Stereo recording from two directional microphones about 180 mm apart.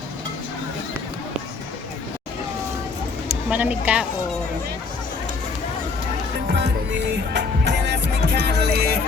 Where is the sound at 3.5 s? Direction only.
10° right (ahead or behind).